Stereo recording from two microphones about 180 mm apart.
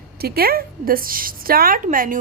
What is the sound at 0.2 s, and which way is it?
A woman's voice, 60° right (ahead or behind).